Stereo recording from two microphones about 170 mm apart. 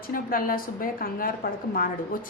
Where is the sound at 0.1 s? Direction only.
55° left (ahead or behind).